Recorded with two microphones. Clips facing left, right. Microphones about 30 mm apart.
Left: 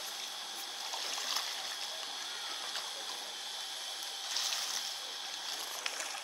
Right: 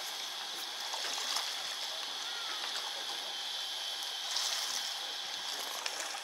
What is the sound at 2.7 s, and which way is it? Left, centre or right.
Water, centre.